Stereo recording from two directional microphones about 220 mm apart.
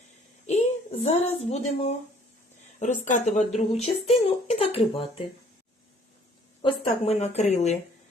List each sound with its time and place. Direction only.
0.5 s a sound: 30° left (ahead or behind)
1.0 s speech: 30° left (ahead or behind)
6.6 s speech: 25° left (ahead or behind)